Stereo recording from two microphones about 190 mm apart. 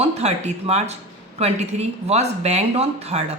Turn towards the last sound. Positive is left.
turn(degrees=-35)  # may be behind; listen again after turning